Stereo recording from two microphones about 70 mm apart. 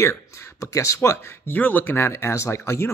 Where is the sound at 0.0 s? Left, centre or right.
Left.